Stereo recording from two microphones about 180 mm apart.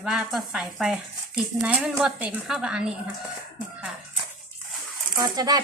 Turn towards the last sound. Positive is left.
turn(degrees=-20)  # may be behind; listen again after turning